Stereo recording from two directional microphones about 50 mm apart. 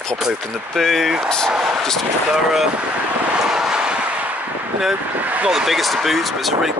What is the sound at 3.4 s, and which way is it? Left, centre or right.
Vehicle, centre.